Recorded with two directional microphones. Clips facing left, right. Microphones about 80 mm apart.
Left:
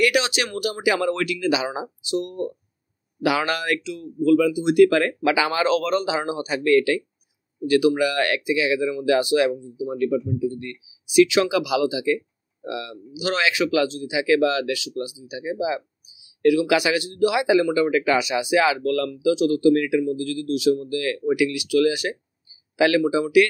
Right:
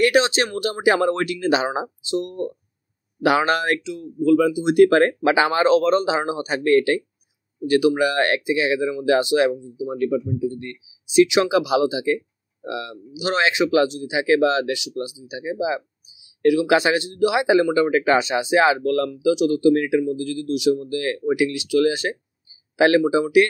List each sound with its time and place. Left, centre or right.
0.0 s speech: right
7.6 s speech: right